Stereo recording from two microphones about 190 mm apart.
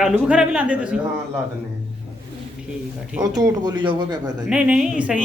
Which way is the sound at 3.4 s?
20° right (ahead or behind).